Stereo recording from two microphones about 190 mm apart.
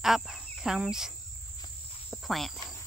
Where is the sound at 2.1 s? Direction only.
Centre (ahead or behind).